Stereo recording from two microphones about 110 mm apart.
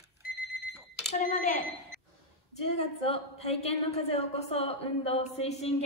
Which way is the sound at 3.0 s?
65° left (ahead or behind).